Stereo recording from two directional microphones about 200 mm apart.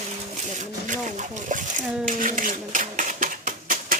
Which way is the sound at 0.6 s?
40° right (ahead or behind).